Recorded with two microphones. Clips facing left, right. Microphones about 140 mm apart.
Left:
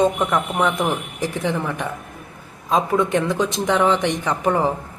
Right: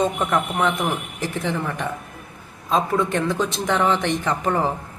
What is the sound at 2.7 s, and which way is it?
Speech, 15° left (ahead or behind).